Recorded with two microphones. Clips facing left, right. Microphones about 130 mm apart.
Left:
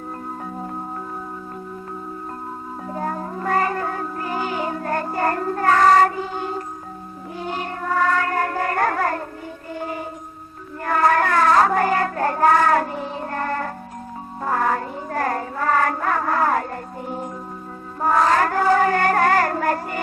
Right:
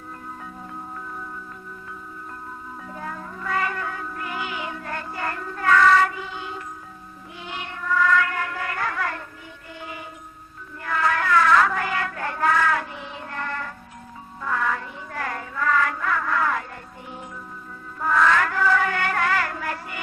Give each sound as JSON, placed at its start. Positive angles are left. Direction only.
{"t": 2.9, "sound": "music", "side_deg": 40}
{"t": 9.7, "sound": "mantra", "side_deg": 45}
{"t": 10.8, "sound": "child singing", "side_deg": 45}
{"t": 14.4, "sound": "music", "side_deg": 40}
{"t": 18.0, "sound": "a sound", "side_deg": 40}